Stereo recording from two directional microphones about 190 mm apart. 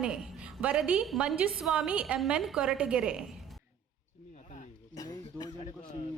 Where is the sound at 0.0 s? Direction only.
5° right (ahead or behind).